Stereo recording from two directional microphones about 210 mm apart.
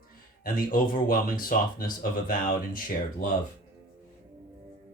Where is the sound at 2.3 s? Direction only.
40° left (ahead or behind).